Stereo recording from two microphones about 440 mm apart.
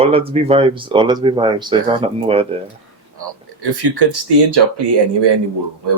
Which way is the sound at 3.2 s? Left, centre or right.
Right.